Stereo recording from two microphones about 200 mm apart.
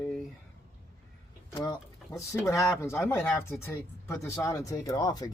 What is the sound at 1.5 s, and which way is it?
Speech, 20° left (ahead or behind).